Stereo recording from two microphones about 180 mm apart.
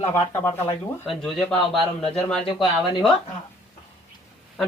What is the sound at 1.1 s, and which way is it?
Speech, centre (ahead or behind).